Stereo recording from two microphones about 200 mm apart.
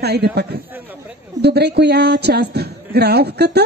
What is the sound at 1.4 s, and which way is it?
A man's voice, 55° right (ahead or behind).